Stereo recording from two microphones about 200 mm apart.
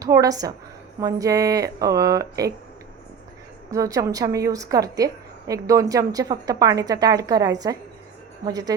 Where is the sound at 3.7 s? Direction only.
15° right (ahead or behind).